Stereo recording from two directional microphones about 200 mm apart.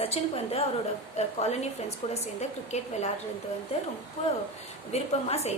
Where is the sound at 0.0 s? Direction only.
30° left (ahead or behind).